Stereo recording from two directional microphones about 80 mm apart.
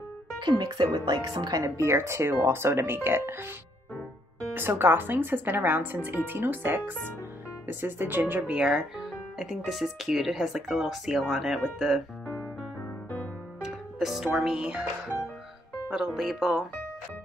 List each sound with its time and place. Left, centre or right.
0.4 s speech: right
1.6 s speech: right
4.6 s speech: right
8.5 s speech: centre
13.6 s speech: centre